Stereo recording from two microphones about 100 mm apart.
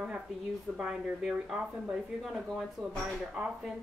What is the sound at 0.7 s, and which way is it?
Speech, 10° right (ahead or behind).